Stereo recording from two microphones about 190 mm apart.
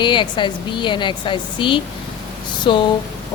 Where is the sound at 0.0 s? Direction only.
25° left (ahead or behind).